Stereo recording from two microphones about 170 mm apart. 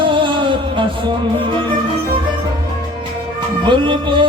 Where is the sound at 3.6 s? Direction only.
30° right (ahead or behind).